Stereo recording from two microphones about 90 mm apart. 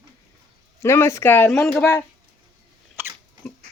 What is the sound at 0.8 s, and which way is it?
Speech, 30° left (ahead or behind).